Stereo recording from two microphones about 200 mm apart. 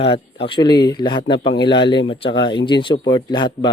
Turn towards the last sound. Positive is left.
turn(degrees=20)  # may be behind; listen again after turning